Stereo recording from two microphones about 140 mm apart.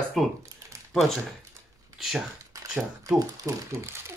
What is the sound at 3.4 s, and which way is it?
Speech, 20° right (ahead or behind).